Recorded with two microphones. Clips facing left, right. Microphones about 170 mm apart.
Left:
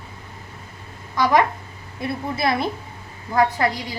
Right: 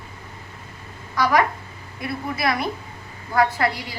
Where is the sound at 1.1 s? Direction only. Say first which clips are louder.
Left 2 dB; 20° left (ahead or behind).